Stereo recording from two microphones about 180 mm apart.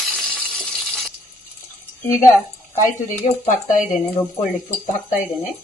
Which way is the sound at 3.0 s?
45° left (ahead or behind).